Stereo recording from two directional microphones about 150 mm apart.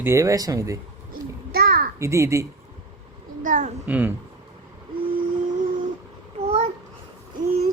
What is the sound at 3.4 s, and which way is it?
Speech, 55° right (ahead or behind).